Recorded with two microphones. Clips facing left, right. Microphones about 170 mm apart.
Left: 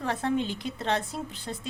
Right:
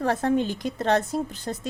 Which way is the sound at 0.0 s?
45° right (ahead or behind).